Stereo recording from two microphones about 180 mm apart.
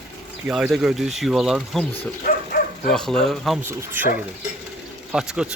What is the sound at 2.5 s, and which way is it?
Dog, 55° left (ahead or behind).